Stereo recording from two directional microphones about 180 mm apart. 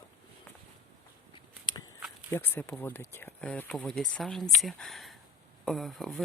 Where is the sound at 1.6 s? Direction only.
25° left (ahead or behind).